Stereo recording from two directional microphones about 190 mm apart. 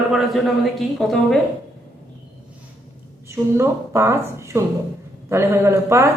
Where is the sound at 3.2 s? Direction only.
15° right (ahead or behind).